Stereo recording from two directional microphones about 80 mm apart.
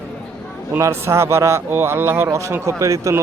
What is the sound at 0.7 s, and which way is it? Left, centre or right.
A man's voice, right.